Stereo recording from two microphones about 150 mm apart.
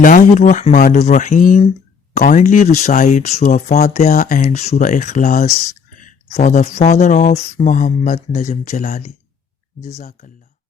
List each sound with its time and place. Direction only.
0.0 s speech: 60° left (ahead or behind)